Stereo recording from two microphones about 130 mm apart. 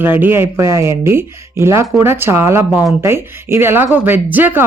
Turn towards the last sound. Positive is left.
turn(degrees=-15)  # may be behind; listen again after turning